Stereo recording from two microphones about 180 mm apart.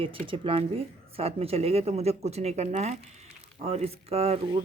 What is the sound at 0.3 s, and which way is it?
Speech, 30° right (ahead or behind).